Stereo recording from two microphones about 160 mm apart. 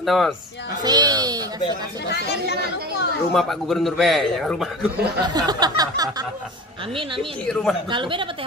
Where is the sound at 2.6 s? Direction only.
75° right (ahead or behind).